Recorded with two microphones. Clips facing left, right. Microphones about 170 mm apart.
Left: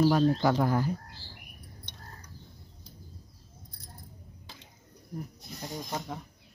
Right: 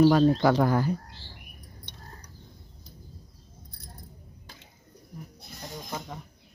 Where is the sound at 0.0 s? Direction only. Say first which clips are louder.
Right 4 dB; 75° right (ahead or behind).